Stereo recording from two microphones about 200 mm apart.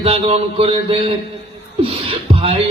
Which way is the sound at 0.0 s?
30° right (ahead or behind).